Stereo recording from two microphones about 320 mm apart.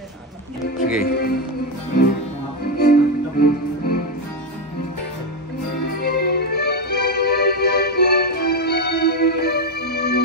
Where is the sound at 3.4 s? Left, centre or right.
Left.